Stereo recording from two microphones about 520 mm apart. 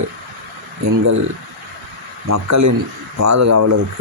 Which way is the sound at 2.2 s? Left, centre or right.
Right.